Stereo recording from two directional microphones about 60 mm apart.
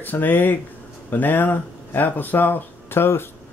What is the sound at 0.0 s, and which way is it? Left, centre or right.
Speech, left.